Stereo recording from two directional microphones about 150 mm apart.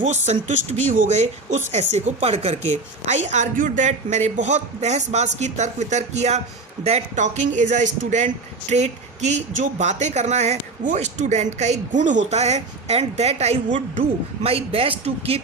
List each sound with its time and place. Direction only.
0.0 s a man's voice: 50° right (ahead or behind)